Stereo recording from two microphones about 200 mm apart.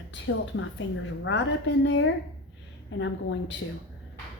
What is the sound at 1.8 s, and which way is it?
A woman's voice, 70° left (ahead or behind).